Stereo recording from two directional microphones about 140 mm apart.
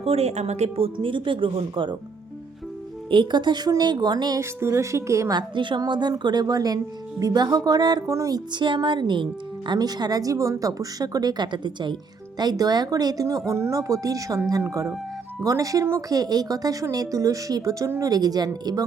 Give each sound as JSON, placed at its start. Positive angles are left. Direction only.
{"t": 0.0, "sound": "a woman's voice", "side_deg": -45}
{"t": 0.9, "sound": "a woman's voice", "side_deg": -35}
{"t": 3.1, "sound": "speech", "side_deg": -35}
{"t": 5.4, "sound": "a woman's voice", "side_deg": -35}